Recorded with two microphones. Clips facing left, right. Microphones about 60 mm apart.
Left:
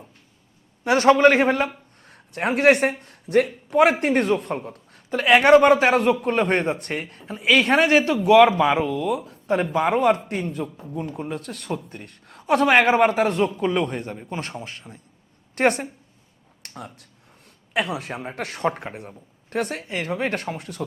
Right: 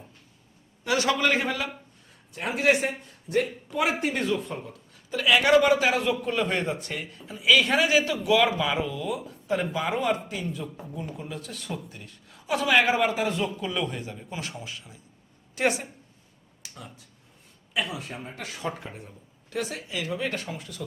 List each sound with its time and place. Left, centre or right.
0.9 s a man's voice: left
2.0 s a man's voice: left